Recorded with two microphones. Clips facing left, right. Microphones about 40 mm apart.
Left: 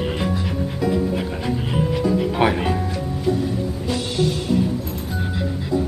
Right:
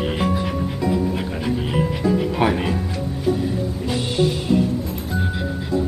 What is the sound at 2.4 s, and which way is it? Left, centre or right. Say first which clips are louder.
Speech: left 1 dB; centre.